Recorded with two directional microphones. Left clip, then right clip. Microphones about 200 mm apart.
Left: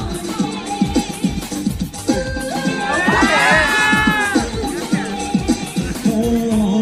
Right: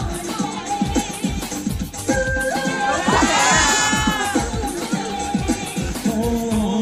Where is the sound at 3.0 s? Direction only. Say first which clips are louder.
Left 4 dB; 60° right (ahead or behind).